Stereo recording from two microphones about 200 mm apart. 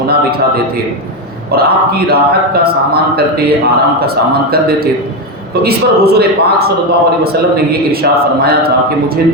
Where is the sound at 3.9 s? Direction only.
50° right (ahead or behind).